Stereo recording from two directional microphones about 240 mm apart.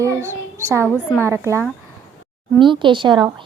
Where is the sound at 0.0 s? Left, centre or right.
Centre.